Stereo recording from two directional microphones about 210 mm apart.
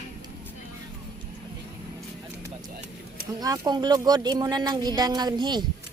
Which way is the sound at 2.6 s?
40° right (ahead or behind).